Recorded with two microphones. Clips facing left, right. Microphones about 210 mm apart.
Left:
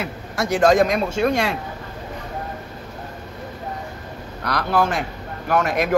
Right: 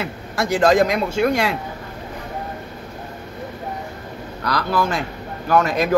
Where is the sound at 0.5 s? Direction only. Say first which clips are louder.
Even; 30° right (ahead or behind).